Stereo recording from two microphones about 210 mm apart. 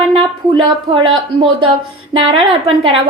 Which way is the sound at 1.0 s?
25° right (ahead or behind).